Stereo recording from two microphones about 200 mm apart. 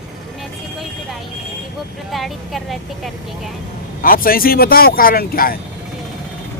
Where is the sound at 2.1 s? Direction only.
Centre (ahead or behind).